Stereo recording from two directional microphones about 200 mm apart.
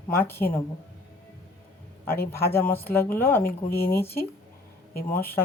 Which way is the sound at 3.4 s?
50° left (ahead or behind).